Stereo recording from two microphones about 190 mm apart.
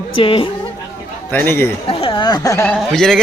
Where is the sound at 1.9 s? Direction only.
30° left (ahead or behind).